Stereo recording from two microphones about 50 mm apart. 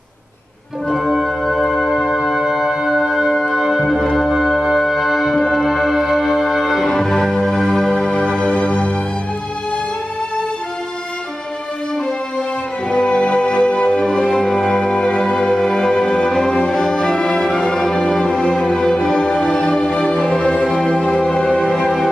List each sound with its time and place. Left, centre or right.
0.9 s music: centre
2.0 s music: centre
6.9 s music: centre
8.4 s music: left
12.9 s music: centre